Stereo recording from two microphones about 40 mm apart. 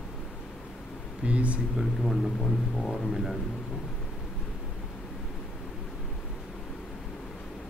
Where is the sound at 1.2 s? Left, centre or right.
Right.